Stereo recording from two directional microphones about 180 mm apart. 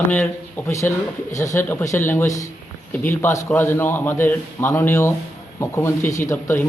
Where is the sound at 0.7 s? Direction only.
15° left (ahead or behind).